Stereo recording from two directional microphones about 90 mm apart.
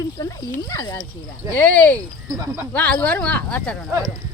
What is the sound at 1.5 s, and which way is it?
Speech, 20° left (ahead or behind).